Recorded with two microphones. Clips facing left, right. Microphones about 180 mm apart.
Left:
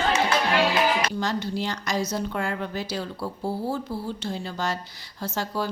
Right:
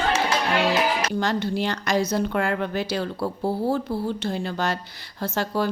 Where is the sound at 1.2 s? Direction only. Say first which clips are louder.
Right 3 dB; 60° right (ahead or behind).